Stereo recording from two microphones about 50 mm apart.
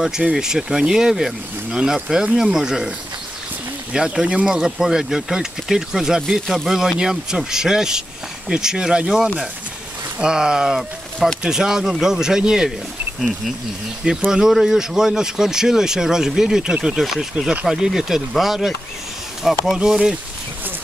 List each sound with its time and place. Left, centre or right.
0.3 s speech: centre
3.9 s speech: centre
14.3 s speech: centre